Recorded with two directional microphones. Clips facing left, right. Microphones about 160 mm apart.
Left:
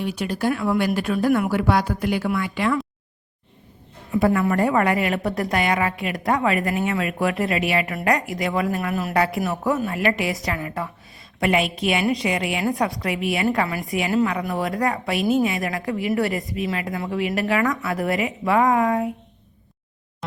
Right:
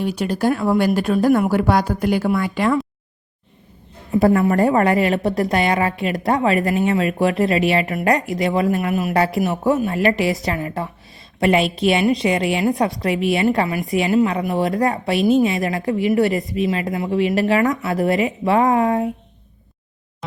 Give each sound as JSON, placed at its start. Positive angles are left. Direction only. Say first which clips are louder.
{"t": 0.0, "sound": "speech", "louder": "right 4 dB", "side_deg": -40}
{"t": 4.1, "sound": "a woman's voice", "louder": "right 4 dB", "side_deg": -30}